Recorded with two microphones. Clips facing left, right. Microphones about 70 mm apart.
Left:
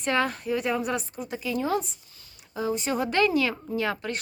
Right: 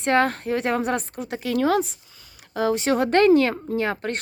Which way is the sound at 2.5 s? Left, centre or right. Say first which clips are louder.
Right 6 dB; right.